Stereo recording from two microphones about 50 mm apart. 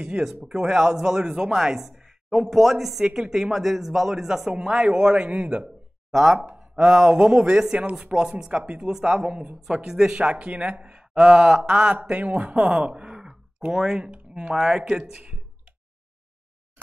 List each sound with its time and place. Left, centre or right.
0.0 s a man's voice: centre
6.1 s a man's voice: centre
10.1 s a man's voice: right